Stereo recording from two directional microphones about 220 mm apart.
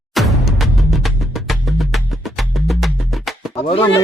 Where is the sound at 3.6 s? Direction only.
25° left (ahead or behind).